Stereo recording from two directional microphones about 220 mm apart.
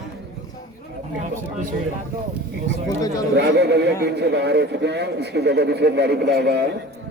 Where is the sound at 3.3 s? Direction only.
50° right (ahead or behind).